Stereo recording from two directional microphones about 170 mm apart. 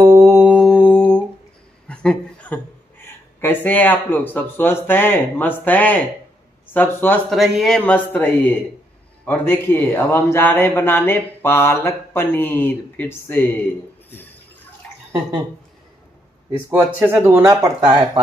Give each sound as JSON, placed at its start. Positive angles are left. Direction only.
{"t": 0.0, "sound": "mantra", "side_deg": -15}
{"t": 0.7, "sound": "humming", "side_deg": 5}
{"t": 1.9, "sound": "a man's voice", "side_deg": 5}
{"t": 7.2, "sound": "speech", "side_deg": 0}
{"t": 16.7, "sound": "speech", "side_deg": -15}